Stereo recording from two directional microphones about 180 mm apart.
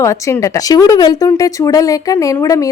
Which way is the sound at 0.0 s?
15° left (ahead or behind).